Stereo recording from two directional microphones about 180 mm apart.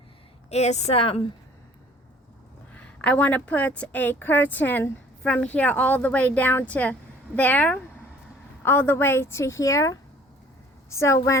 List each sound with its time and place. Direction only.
0.5 s speech: 40° left (ahead or behind)
2.7 s a woman's voice: 5° left (ahead or behind)